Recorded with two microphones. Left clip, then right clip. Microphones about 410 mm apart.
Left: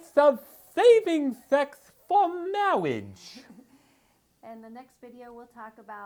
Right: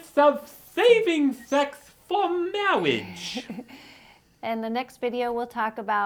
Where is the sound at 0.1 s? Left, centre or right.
Left.